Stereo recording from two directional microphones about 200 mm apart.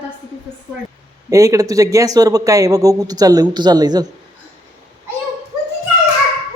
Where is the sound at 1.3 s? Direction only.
15° right (ahead or behind).